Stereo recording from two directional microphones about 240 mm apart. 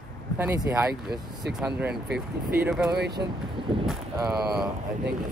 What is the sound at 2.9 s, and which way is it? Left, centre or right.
Speech, right.